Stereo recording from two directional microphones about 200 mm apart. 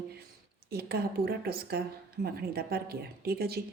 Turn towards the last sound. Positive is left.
turn(degrees=-50)  # may be behind; listen again after turning